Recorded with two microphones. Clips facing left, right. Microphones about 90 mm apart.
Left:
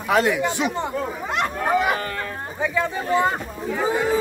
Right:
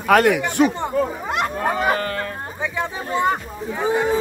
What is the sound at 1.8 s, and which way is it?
Speech, 40° right (ahead or behind).